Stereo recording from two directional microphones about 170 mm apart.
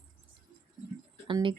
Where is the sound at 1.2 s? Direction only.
30° right (ahead or behind).